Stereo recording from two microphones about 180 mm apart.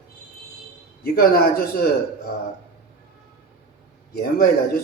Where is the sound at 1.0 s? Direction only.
55° left (ahead or behind).